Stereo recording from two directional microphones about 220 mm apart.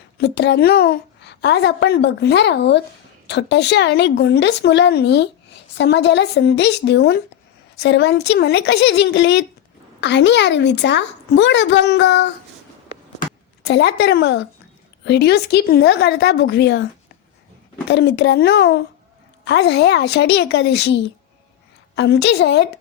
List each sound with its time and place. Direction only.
0.2 s a woman's voice: 50° left (ahead or behind)
13.1 s a sound: 50° left (ahead or behind)
15.0 s a woman's voice: 50° left (ahead or behind)
17.8 s a woman's voice: 50° left (ahead or behind)